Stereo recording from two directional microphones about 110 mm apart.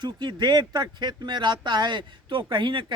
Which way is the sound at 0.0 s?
40° right (ahead or behind).